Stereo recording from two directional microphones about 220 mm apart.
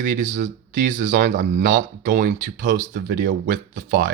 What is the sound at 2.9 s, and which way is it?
Speech, 50° right (ahead or behind).